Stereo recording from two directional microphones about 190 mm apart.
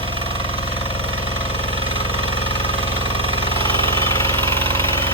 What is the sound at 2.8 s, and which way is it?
Jackhammer, 30° right (ahead or behind).